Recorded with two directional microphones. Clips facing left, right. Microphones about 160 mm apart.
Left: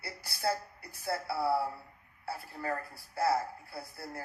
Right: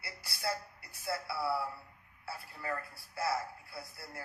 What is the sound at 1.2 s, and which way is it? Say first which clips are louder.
Speech: left 5 dB; 45° left (ahead or behind).